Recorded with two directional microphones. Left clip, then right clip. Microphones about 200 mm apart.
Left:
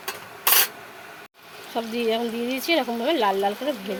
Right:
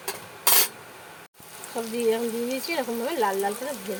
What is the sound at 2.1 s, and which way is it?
Speech, 40° left (ahead or behind).